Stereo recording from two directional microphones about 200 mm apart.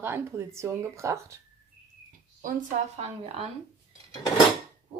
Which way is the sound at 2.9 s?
30° right (ahead or behind).